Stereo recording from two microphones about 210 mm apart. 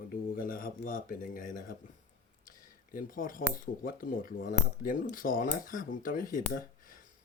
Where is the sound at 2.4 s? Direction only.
40° left (ahead or behind).